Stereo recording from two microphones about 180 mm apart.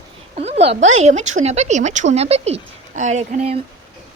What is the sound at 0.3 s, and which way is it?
A woman's voice, 35° right (ahead or behind).